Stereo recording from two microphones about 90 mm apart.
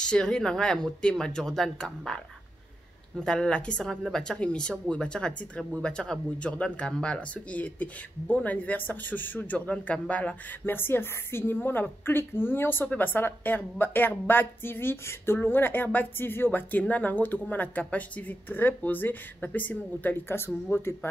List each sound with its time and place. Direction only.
0.0 s a woman's voice: 10° left (ahead or behind)